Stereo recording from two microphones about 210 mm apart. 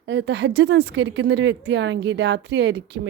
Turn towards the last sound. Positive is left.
turn(degrees=-55)  # may be behind; listen again after turning